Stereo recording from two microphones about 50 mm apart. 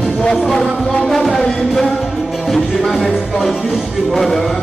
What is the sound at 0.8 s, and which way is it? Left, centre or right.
Music, centre.